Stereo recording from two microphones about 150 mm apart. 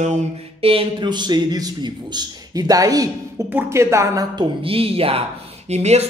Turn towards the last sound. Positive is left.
turn(degrees=-45)  # may be behind; listen again after turning